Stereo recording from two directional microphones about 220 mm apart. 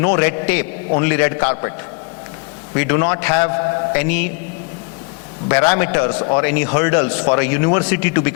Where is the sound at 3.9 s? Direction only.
15° left (ahead or behind).